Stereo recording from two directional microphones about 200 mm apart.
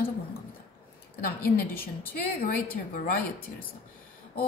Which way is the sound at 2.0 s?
45° left (ahead or behind).